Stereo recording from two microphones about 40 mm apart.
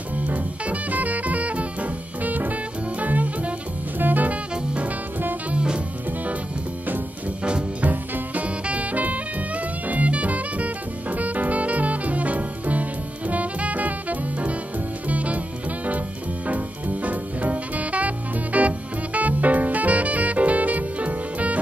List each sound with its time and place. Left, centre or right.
0.3 s music: right
5.5 s jazz: right
7.8 s music: right